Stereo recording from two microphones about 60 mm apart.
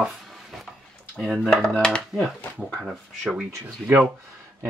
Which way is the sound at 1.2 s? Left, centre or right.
Centre.